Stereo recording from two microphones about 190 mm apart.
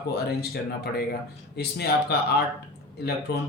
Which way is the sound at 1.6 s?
60° left (ahead or behind).